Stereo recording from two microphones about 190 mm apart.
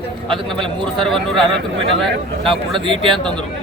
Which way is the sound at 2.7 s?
25° right (ahead or behind).